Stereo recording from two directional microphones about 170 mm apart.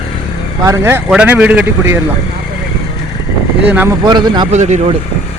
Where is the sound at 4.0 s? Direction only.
25° right (ahead or behind).